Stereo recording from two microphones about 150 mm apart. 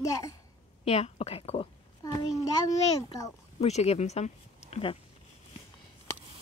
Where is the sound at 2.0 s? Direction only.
25° left (ahead or behind).